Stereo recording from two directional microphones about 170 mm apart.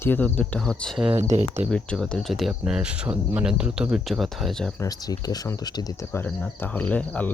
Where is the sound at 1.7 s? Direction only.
5° left (ahead or behind).